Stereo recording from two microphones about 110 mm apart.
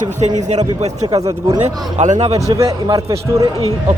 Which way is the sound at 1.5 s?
90° right.